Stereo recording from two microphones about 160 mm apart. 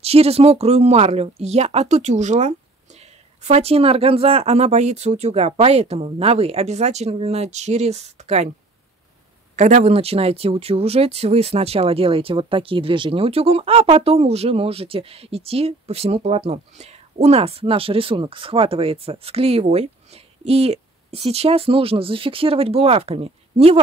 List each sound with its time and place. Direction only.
0.0 s speech: 40° right (ahead or behind)
9.6 s speech: 45° right (ahead or behind)